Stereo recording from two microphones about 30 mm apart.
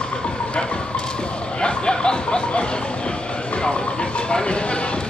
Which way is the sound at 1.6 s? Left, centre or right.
Left.